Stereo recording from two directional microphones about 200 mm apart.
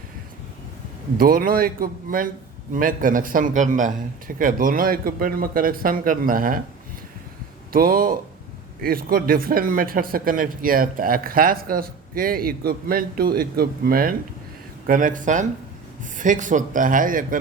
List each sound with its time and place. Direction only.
1.2 s speech: 45° right (ahead or behind)
7.7 s speech: 45° right (ahead or behind)